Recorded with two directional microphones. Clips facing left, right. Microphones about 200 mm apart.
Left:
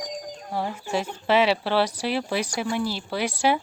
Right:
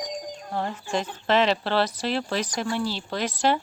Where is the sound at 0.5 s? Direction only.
10° left (ahead or behind).